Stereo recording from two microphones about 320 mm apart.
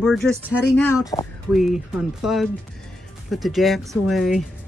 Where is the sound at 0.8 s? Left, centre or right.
Centre.